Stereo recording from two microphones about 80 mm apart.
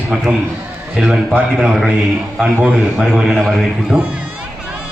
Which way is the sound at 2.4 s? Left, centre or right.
Centre.